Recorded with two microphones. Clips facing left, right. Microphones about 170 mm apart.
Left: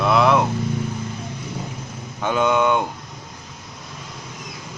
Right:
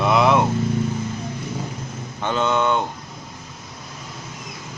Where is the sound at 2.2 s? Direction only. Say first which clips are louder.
Left 2 dB; 10° left (ahead or behind).